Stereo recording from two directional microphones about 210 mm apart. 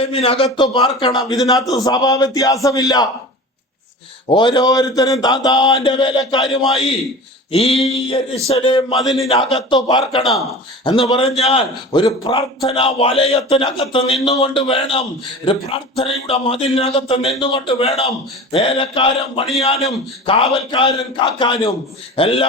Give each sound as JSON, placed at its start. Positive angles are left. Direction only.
{"t": 0.0, "sound": "a man's voice", "side_deg": 30}
{"t": 4.3, "sound": "a man's voice", "side_deg": 20}
{"t": 6.6, "sound": "a man's voice", "side_deg": 0}
{"t": 7.5, "sound": "a man's voice", "side_deg": 30}
{"t": 11.9, "sound": "a man's voice", "side_deg": 15}